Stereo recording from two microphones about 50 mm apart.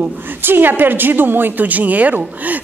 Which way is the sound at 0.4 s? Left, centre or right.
Right.